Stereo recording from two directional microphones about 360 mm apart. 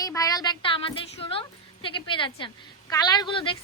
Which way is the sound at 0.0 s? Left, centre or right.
Centre.